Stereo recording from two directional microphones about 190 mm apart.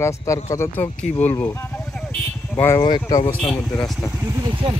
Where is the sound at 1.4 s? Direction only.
10° left (ahead or behind).